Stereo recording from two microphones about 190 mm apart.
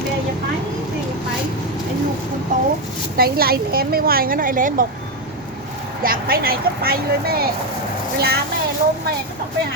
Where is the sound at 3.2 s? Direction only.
50° right (ahead or behind).